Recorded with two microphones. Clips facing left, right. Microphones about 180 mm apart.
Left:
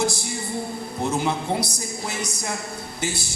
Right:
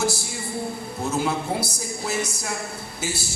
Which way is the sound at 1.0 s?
25° left (ahead or behind).